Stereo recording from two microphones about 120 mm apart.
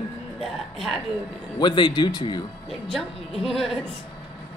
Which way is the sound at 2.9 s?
5° left (ahead or behind).